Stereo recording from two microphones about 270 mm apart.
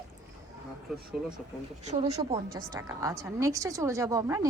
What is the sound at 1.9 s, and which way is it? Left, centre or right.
Speech, right.